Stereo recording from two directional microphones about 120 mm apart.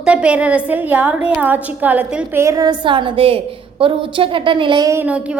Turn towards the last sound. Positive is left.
turn(degrees=-25)  # may be behind; listen again after turning